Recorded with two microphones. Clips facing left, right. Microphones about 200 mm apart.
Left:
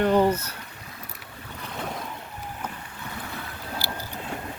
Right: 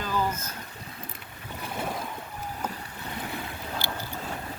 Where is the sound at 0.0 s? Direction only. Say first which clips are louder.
Left 9 dB; 65° left (ahead or behind).